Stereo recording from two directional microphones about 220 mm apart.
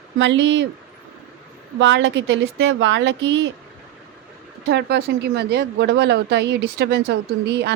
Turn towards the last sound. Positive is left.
turn(degrees=-50)  # may be behind; listen again after turning